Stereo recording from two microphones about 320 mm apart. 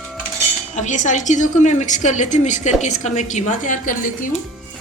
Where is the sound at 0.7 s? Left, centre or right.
Left.